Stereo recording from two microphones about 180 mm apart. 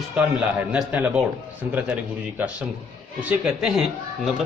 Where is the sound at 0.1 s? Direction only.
10° right (ahead or behind).